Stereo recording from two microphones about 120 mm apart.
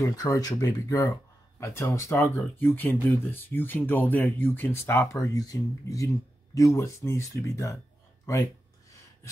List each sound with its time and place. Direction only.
0.0 s speech: 30° left (ahead or behind)